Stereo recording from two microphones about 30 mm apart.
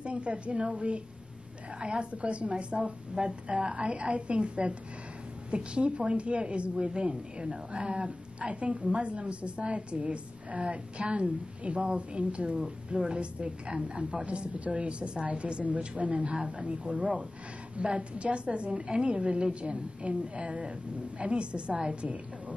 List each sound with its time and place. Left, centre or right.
0.0 s a woman's voice: right
12.5 s speech: right